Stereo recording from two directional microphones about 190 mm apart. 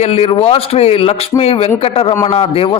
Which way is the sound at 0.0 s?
35° left (ahead or behind).